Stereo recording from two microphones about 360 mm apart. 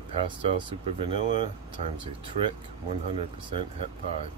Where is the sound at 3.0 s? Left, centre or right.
Centre.